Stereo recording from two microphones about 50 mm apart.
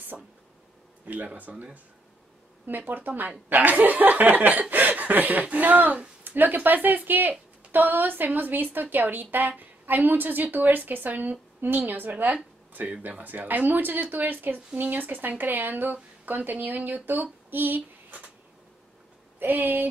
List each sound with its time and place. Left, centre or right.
0.1 s speech: centre
1.0 s speech: right
2.6 s speech: right
19.4 s speech: right